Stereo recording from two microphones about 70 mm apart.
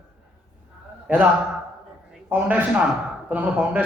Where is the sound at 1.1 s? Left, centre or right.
Right.